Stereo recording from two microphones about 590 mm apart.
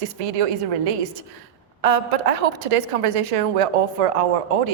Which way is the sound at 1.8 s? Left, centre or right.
Right.